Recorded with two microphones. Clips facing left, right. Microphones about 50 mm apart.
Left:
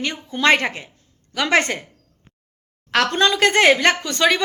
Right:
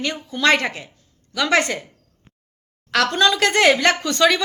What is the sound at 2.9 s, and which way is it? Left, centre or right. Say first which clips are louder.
A woman's voice: even; left.